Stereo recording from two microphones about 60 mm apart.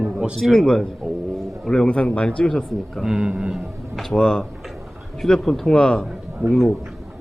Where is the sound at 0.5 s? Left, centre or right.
Centre.